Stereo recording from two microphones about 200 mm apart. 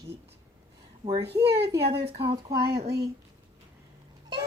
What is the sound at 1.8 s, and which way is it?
Speech, 30° right (ahead or behind).